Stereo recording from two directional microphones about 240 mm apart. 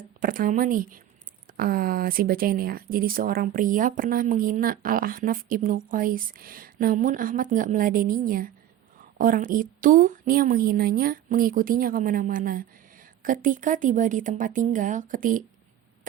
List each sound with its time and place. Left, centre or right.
0.2 s speech: right